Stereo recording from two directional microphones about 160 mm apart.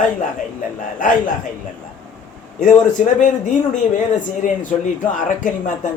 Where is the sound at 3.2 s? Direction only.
50° left (ahead or behind).